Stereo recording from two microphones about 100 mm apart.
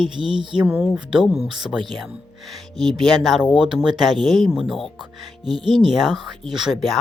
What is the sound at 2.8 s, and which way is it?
Speech, centre (ahead or behind).